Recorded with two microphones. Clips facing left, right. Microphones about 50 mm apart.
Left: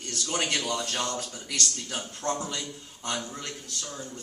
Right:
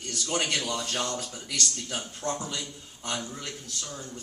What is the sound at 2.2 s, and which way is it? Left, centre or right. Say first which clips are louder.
Speech: left 2 dB; left.